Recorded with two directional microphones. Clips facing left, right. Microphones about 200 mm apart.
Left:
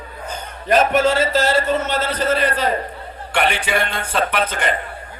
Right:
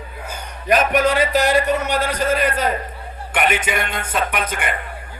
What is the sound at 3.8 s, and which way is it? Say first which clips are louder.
Speech: left 2 dB; 10° right (ahead or behind).